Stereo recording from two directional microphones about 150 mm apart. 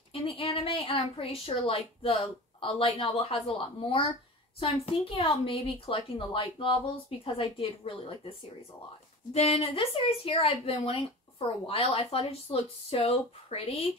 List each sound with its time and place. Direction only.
0.1 s a woman's voice: 40° left (ahead or behind)